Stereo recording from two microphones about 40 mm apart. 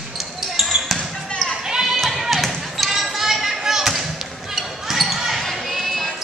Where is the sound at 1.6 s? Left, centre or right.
Centre.